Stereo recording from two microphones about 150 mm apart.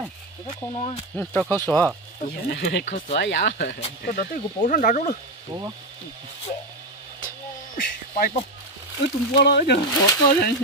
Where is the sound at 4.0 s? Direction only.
70° left (ahead or behind).